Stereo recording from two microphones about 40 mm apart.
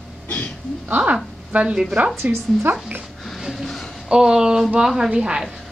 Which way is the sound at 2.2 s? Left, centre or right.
Right.